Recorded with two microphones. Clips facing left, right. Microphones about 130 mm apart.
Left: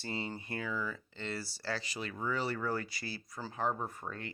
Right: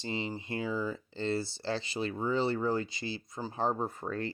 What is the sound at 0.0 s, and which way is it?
Speech, 20° right (ahead or behind).